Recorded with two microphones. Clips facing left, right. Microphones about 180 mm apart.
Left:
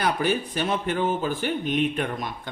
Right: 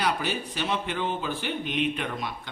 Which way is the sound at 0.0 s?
50° left (ahead or behind).